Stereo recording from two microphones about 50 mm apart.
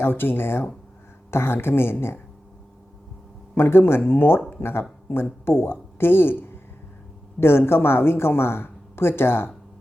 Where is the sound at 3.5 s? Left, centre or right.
Left.